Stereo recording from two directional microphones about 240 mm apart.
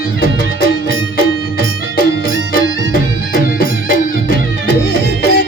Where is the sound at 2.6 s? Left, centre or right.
Right.